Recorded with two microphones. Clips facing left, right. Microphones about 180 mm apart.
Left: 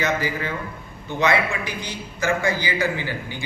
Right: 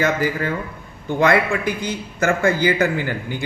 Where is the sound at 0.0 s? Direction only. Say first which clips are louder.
Right 4 dB; 50° right (ahead or behind).